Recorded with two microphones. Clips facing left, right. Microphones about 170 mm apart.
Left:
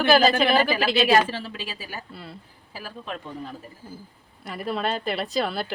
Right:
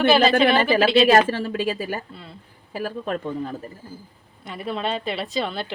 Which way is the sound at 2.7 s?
50° right (ahead or behind).